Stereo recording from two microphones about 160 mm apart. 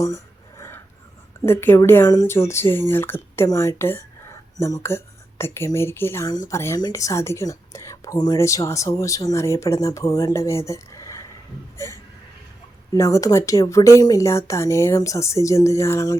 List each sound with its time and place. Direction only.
1.5 s a woman's voice: 15° left (ahead or behind)
12.9 s a woman's voice: 20° left (ahead or behind)